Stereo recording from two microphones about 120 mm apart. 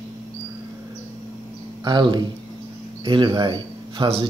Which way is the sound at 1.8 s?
40° right (ahead or behind).